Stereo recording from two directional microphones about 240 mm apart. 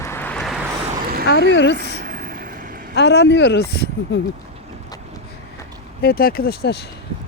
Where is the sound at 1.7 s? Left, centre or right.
Right.